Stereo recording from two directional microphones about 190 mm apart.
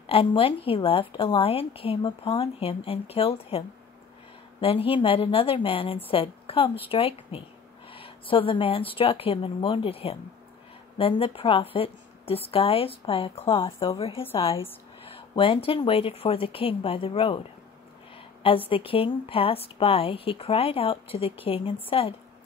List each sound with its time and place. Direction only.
0.0 s a woman's voice: 30° left (ahead or behind)